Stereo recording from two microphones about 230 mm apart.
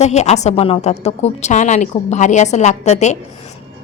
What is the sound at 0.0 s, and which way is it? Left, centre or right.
Speech, left.